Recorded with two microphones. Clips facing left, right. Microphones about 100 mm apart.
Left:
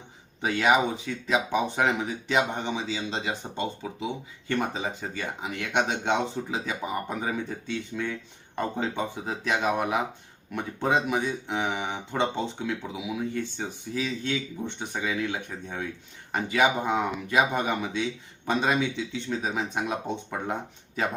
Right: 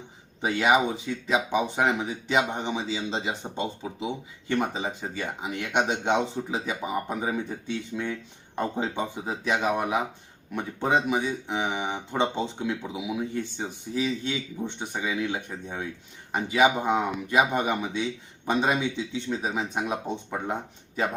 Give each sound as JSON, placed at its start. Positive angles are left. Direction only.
{"t": 0.4, "sound": "speech", "side_deg": -10}
{"t": 1.5, "sound": "speech", "side_deg": -5}